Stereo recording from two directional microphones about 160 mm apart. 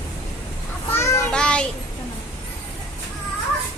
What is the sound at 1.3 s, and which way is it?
Child singing, 5° left (ahead or behind).